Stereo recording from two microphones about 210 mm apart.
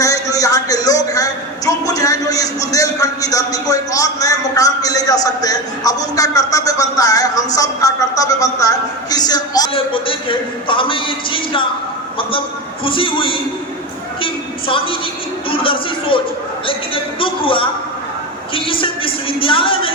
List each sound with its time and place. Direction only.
0.0 s a man's voice: 15° left (ahead or behind)
12.8 s speech: 25° left (ahead or behind)
15.4 s speech: 25° left (ahead or behind)